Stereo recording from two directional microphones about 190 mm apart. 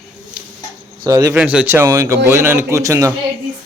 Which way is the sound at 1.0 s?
15° right (ahead or behind).